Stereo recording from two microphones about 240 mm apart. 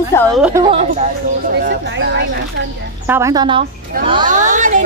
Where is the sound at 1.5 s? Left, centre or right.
Right.